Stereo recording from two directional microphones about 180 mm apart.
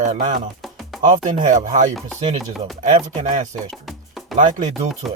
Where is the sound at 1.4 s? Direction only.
45° right (ahead or behind).